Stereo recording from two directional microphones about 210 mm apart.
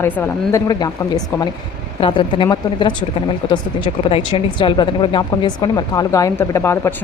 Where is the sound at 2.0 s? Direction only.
25° left (ahead or behind).